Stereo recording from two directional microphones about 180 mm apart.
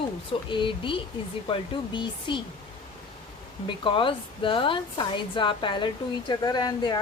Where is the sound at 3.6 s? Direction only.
25° left (ahead or behind).